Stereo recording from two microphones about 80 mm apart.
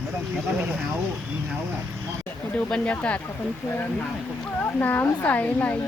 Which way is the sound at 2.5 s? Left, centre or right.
Centre.